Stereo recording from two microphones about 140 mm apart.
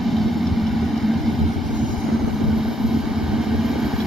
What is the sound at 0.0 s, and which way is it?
Vehicle, centre (ahead or behind).